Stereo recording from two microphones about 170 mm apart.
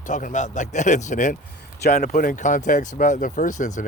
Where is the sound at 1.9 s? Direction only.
60° left (ahead or behind).